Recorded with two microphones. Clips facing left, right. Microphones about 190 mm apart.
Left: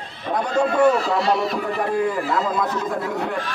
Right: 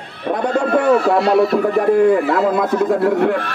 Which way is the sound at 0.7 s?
60° right (ahead or behind).